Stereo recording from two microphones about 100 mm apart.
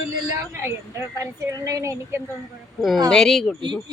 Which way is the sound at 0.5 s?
25° right (ahead or behind).